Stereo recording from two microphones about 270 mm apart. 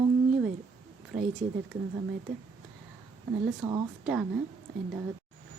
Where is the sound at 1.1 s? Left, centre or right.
Right.